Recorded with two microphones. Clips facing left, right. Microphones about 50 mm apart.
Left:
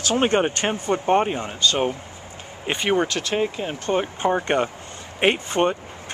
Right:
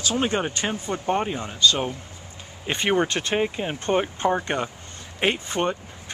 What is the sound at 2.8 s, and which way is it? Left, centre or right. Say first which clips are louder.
Speech: left 1 dB; centre.